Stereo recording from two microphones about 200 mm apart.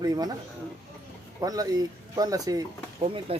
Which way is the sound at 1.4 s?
20° right (ahead or behind).